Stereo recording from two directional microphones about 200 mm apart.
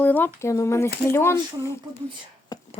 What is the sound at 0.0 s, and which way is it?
Speech, 10° left (ahead or behind).